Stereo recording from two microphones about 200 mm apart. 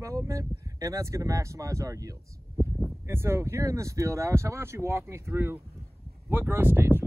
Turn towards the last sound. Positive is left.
turn(degrees=-10)  # may be behind; listen again after turning